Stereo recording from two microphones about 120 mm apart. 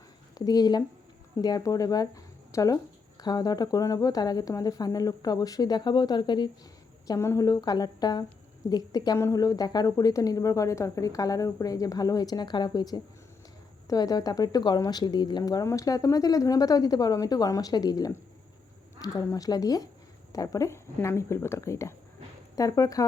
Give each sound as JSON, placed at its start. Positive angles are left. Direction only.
{"t": 0.3, "sound": "speech", "side_deg": 35}
{"t": 7.1, "sound": "speech", "side_deg": 25}